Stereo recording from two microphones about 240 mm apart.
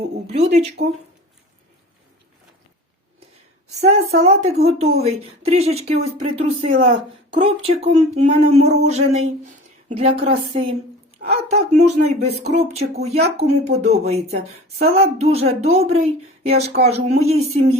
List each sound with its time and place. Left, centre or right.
0.3 s speech: right
3.7 s speech: right